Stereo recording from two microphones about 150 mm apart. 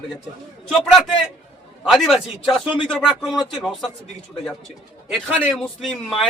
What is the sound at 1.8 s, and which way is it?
Speech, centre (ahead or behind).